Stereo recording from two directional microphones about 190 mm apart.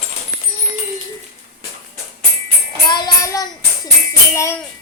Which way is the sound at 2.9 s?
20° left (ahead or behind).